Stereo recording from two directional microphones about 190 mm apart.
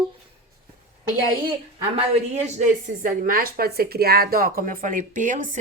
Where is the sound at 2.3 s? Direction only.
35° right (ahead or behind).